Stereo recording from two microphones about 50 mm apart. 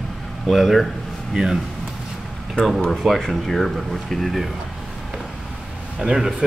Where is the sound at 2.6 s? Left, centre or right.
Left.